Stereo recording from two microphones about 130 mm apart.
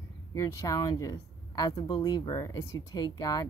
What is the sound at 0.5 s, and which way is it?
Speech, 25° left (ahead or behind).